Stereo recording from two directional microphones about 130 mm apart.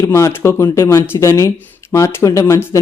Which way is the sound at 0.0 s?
20° left (ahead or behind).